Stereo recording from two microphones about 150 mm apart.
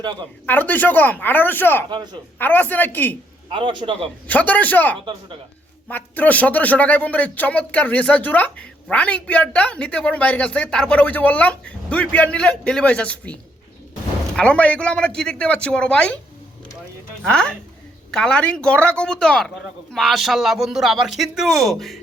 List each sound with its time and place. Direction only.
0.0 s speech: 30° right (ahead or behind)
0.4 s speech: 10° left (ahead or behind)
1.9 s a man's voice: 30° right (ahead or behind)
2.4 s speech: 10° left (ahead or behind)
3.5 s a man's voice: 35° right (ahead or behind)
4.3 s speech: 10° left (ahead or behind)
17.2 s a man's voice: 5° left (ahead or behind)